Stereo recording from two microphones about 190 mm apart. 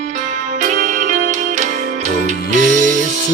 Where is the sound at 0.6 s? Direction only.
40° right (ahead or behind).